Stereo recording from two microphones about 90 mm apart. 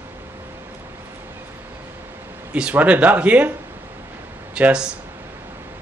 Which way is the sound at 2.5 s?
15° right (ahead or behind).